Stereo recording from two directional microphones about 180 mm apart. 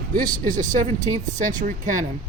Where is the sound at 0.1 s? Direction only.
50° right (ahead or behind).